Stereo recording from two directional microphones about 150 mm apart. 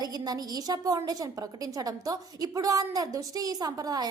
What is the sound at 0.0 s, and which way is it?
A woman's voice, 25° right (ahead or behind).